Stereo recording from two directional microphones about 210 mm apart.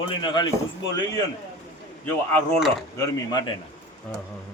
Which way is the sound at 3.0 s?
20° left (ahead or behind).